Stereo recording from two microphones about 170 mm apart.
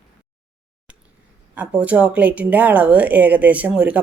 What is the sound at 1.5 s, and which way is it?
Speech, 10° right (ahead or behind).